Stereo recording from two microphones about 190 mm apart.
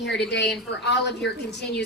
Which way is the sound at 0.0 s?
65° left (ahead or behind).